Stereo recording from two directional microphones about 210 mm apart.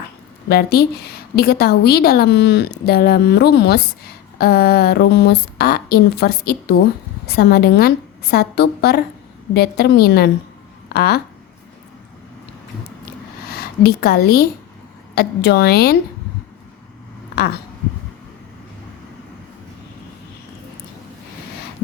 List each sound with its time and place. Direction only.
0.4 s a woman's voice: 50° left (ahead or behind)
13.5 s a woman's voice: 50° left (ahead or behind)